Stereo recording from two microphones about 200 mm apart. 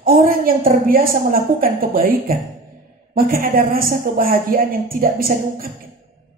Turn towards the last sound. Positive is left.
turn(degrees=-45)  # may be behind; listen again after turning